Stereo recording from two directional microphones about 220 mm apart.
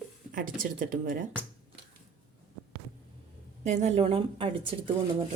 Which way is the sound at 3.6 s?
30° right (ahead or behind).